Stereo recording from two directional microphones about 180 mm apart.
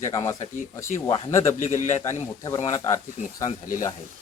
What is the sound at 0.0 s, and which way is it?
Speech, 15° left (ahead or behind).